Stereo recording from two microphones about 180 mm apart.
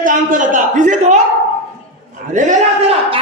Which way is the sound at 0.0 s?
45° right (ahead or behind).